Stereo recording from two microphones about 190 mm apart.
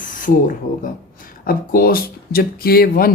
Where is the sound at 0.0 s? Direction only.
45° left (ahead or behind).